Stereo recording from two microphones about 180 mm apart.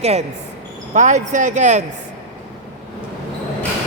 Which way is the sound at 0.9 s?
40° right (ahead or behind).